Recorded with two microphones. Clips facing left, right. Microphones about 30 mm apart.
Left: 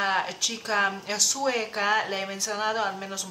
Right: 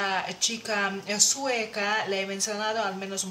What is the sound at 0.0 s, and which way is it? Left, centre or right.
Speech, centre.